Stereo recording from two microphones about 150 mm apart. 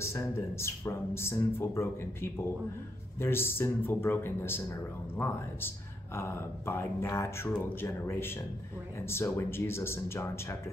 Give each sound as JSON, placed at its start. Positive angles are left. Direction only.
{"t": 0.0, "sound": "speech", "side_deg": 20}